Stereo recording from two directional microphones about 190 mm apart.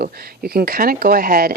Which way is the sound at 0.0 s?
55° right (ahead or behind).